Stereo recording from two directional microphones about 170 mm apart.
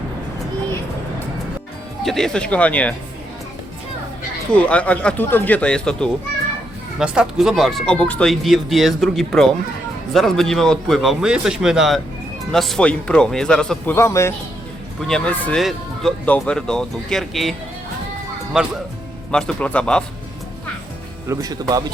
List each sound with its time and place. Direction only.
2.0 s speech: centre (ahead or behind)
4.5 s speech: 10° left (ahead or behind)
13.9 s speech: 15° left (ahead or behind)
15.0 s speech: 5° left (ahead or behind)
18.5 s speech: 5° right (ahead or behind)
21.2 s speech: 20° right (ahead or behind)